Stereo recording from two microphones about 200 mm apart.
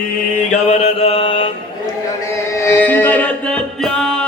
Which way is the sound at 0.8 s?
30° left (ahead or behind).